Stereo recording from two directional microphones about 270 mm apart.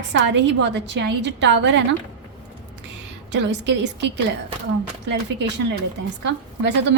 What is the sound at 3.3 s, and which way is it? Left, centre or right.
A woman's voice, right.